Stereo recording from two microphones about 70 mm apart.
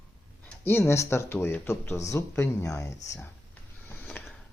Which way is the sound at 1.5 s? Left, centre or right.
Left.